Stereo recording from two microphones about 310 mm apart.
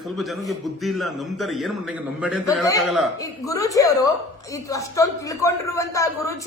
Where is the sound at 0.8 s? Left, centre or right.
Centre.